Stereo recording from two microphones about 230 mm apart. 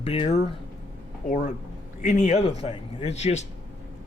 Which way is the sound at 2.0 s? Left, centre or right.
Left.